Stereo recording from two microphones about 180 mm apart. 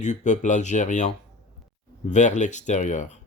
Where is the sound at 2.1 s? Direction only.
40° left (ahead or behind).